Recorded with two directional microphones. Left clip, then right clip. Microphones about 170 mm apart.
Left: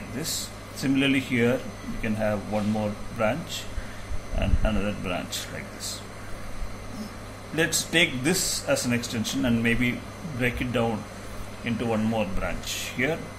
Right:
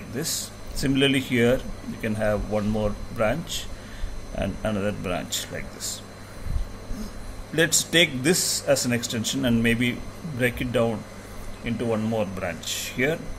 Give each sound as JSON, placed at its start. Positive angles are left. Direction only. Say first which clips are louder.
{"t": 0.2, "sound": "speech", "louder": "right 2 dB", "side_deg": -55}
{"t": 7.5, "sound": "speech", "louder": "right 3 dB", "side_deg": -55}